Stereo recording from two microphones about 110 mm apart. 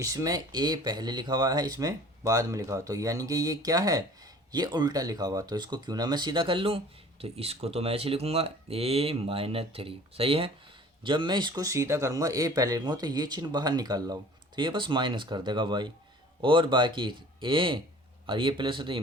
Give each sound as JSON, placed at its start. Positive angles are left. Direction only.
{"t": 0.0, "sound": "speech", "side_deg": -30}